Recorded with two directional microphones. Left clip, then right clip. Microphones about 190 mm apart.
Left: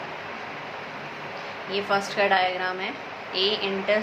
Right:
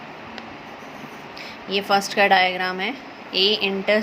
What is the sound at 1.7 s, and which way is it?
A woman's voice, 55° right (ahead or behind).